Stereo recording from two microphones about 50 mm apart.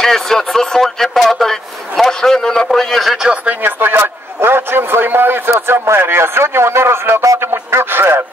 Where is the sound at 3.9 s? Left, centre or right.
Right.